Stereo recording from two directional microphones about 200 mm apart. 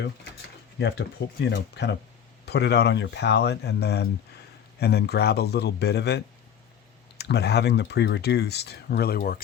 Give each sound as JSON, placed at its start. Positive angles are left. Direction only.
{"t": 0.8, "sound": "speech", "side_deg": 55}